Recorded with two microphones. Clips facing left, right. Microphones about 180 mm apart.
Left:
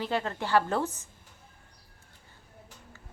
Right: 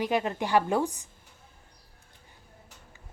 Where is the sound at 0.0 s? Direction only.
15° right (ahead or behind).